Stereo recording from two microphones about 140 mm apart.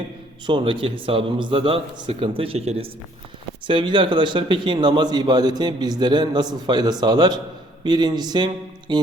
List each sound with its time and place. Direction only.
0.4 s a man's voice: 35° right (ahead or behind)
3.7 s a man's voice: 35° right (ahead or behind)